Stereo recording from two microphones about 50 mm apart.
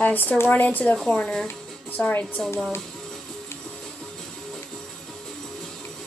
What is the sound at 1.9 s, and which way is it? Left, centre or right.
Speech, left.